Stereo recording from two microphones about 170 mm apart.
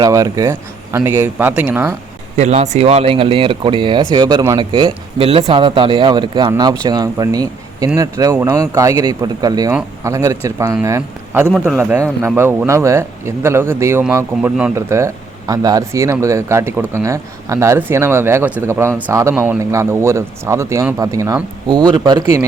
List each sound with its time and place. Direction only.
0.0 s a man's voice: 20° right (ahead or behind)
2.3 s a man's voice: 40° right (ahead or behind); by 11.4 s 20° right (ahead or behind)
11.5 s a man's voice: centre (ahead or behind)
11.8 s speech: 10° right (ahead or behind)